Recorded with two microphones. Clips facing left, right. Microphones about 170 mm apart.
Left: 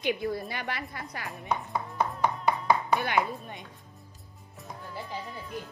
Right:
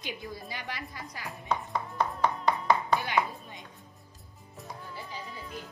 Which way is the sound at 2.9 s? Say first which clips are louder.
Left 2 dB; 60° left (ahead or behind).